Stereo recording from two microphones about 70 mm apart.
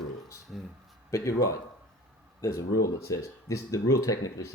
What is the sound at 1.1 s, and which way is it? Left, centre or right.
Speech, left.